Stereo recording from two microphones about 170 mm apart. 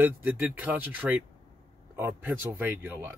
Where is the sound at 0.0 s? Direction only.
10° right (ahead or behind).